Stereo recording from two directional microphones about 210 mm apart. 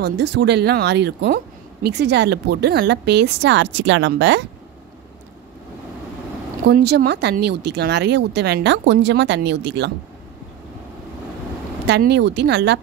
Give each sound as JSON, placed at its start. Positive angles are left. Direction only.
{"t": 0.0, "sound": "speech", "side_deg": -50}
{"t": 6.7, "sound": "speech", "side_deg": -50}
{"t": 11.8, "sound": "speech", "side_deg": -55}